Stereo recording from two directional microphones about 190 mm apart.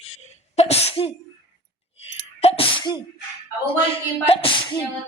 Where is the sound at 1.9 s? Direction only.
30° left (ahead or behind).